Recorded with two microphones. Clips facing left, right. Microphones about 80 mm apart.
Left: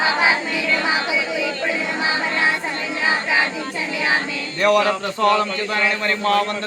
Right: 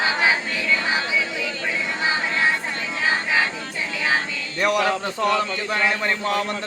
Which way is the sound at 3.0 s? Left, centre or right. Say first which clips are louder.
Left 2 dB; centre.